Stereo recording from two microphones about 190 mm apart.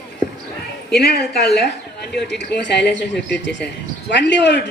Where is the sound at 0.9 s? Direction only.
55° left (ahead or behind).